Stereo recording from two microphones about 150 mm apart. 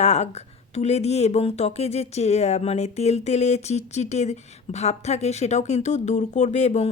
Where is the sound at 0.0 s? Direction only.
50° left (ahead or behind).